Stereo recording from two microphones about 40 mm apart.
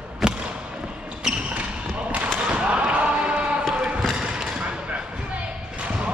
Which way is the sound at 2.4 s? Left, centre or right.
Right.